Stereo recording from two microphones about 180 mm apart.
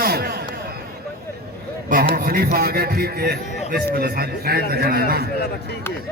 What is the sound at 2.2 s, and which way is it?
A man's voice, 60° right (ahead or behind).